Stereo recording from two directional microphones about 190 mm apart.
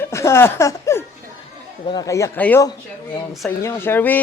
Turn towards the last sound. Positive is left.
turn(degrees=10)  # may be behind; listen again after turning